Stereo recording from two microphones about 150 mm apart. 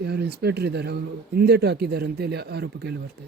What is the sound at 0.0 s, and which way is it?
A man's voice, 90° right.